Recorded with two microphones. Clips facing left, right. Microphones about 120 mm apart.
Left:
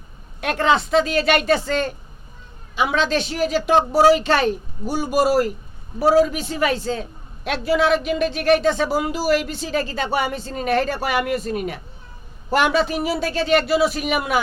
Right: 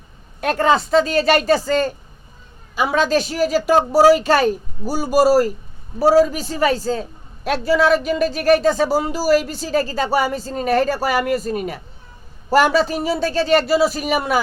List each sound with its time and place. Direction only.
0.4 s a man's voice: 40° right (ahead or behind)